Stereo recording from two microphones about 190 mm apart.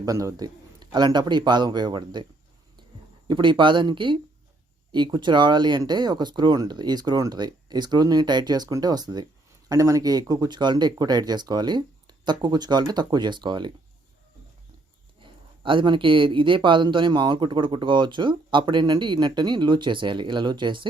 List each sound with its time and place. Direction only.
0.0 s speech: 20° right (ahead or behind)
3.2 s speech: 25° right (ahead or behind)
15.2 s speech: 25° right (ahead or behind)